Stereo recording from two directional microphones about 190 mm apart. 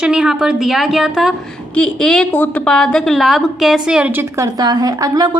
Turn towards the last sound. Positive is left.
turn(degrees=-20)  # may be behind; listen again after turning